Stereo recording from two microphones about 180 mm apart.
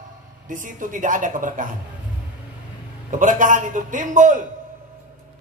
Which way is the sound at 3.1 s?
45° right (ahead or behind).